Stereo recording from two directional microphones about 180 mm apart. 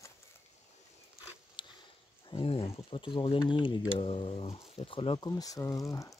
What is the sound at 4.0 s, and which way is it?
Speech, 30° left (ahead or behind).